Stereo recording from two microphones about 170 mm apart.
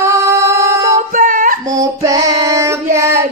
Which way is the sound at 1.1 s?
50° right (ahead or behind).